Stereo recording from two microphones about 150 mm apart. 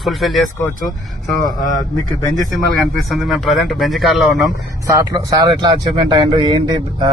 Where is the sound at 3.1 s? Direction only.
Centre (ahead or behind).